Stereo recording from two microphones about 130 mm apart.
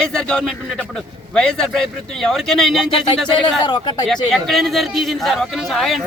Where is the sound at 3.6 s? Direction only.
35° left (ahead or behind).